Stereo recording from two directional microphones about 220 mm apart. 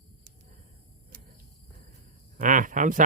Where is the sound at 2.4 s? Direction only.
35° right (ahead or behind).